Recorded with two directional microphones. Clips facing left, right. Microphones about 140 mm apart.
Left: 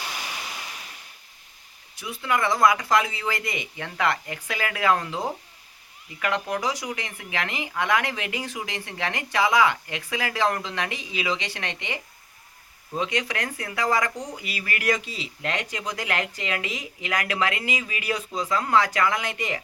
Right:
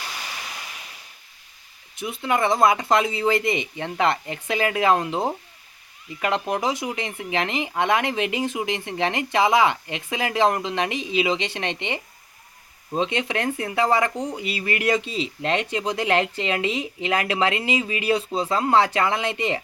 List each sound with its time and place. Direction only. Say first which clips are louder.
2.0 s speech: right 3 dB; 25° right (ahead or behind)